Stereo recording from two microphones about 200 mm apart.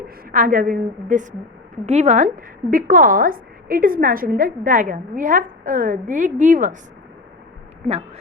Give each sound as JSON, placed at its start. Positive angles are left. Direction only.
{"t": 0.3, "sound": "a woman's voice", "side_deg": -45}